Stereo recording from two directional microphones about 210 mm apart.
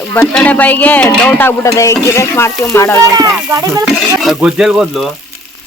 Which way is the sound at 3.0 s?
15° right (ahead or behind).